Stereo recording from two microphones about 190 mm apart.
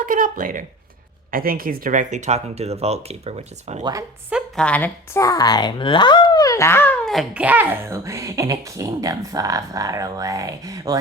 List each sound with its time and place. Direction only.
0.0 s speech: 45° right (ahead or behind)
4.3 s a woman's voice: 5° right (ahead or behind)
4.6 s speech: 10° left (ahead or behind); by 10.9 s 20° right (ahead or behind)